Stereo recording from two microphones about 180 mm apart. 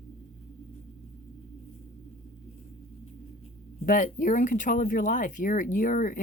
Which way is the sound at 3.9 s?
45° left (ahead or behind).